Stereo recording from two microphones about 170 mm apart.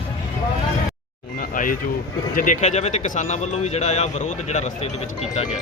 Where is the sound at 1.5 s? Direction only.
55° left (ahead or behind).